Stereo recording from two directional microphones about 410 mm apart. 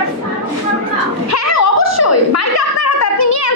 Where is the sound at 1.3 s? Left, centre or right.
Left.